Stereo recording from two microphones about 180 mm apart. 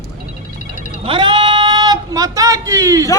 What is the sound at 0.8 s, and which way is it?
Music, 45° left (ahead or behind).